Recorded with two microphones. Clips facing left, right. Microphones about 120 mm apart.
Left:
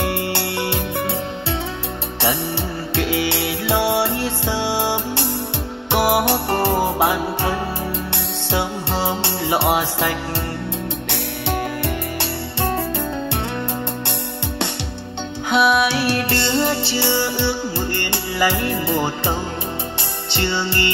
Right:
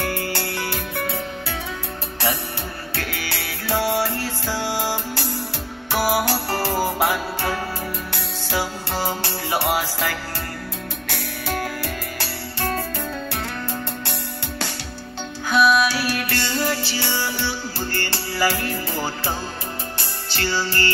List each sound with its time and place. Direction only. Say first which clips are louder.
0.0 s music: left 4 dB; 25° left (ahead or behind)
3.0 s music: left 10 dB; 25° left (ahead or behind)
15.5 s music: left 1 dB; 25° left (ahead or behind)